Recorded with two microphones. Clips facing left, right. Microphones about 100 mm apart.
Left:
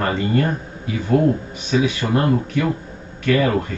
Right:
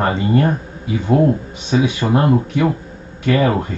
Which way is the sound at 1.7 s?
20° right (ahead or behind).